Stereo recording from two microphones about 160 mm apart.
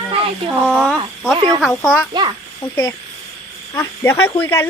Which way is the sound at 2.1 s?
25° right (ahead or behind).